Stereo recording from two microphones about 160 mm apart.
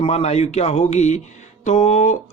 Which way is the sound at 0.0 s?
40° left (ahead or behind).